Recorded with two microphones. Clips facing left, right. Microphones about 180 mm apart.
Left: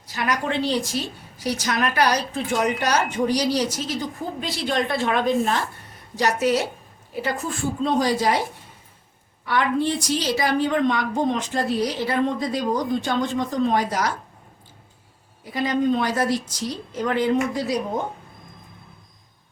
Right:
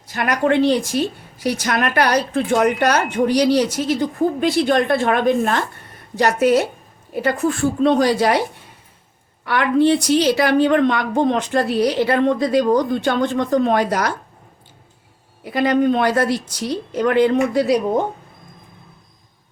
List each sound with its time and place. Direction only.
0.1 s a woman's voice: 60° right (ahead or behind)
9.5 s a woman's voice: 70° right (ahead or behind)
15.4 s a woman's voice: 65° right (ahead or behind)